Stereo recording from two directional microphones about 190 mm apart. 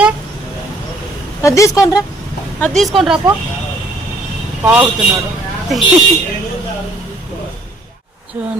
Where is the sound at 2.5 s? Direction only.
5° left (ahead or behind).